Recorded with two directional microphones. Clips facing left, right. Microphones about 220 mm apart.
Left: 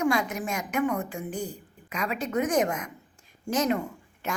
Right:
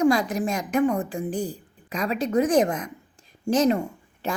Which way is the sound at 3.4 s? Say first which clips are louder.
Right 5 dB; 30° right (ahead or behind).